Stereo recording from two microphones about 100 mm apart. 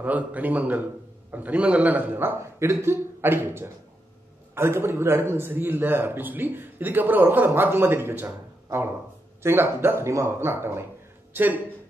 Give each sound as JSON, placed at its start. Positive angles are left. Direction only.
{"t": 0.0, "sound": "a man's voice", "side_deg": -15}